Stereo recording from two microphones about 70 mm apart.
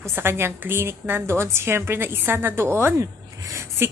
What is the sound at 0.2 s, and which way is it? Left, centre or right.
A woman's voice, right.